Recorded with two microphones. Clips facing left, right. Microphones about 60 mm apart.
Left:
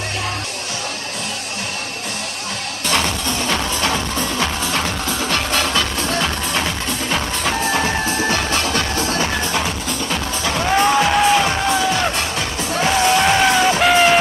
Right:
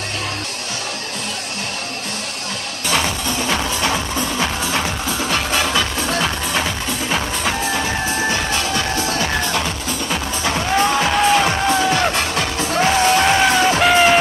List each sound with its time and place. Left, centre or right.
2.9 s music: centre
9.5 s music: centre
12.1 s music: right
12.7 s music: centre